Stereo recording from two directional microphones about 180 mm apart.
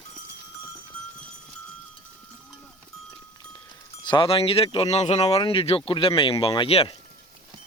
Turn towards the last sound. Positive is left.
turn(degrees=30)  # may be behind; listen again after turning